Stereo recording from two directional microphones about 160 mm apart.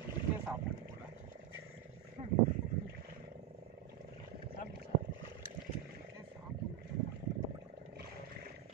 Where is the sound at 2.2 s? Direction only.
40° right (ahead or behind).